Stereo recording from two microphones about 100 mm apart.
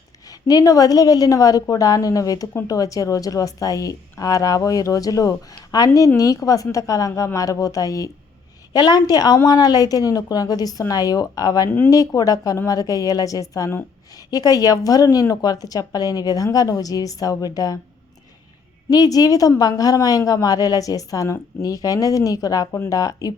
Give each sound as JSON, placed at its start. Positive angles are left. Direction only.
{"t": 0.3, "sound": "a woman's voice", "side_deg": 35}
{"t": 18.9, "sound": "a woman's voice", "side_deg": 40}